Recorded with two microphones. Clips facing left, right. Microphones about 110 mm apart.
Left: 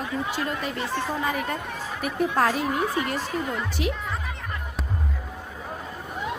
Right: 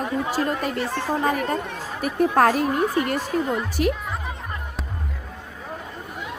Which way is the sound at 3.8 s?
50° right (ahead or behind).